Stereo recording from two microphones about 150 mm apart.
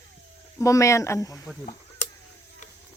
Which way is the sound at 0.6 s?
20° left (ahead or behind).